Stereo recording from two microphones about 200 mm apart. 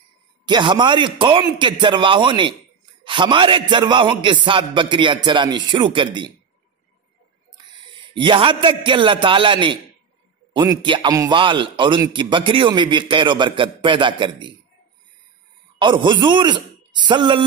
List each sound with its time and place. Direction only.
0.5 s a man's voice: 25° right (ahead or behind)
8.1 s a man's voice: 25° right (ahead or behind)
15.8 s a man's voice: 25° right (ahead or behind)